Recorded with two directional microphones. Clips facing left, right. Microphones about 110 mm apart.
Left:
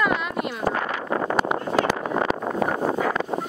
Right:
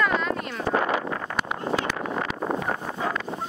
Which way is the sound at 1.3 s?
35° left (ahead or behind).